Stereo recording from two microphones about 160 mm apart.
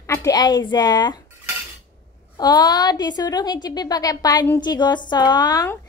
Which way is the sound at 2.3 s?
25° left (ahead or behind).